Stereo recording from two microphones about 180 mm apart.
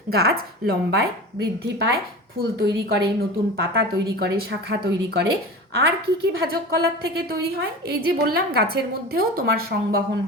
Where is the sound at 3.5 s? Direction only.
65° right (ahead or behind).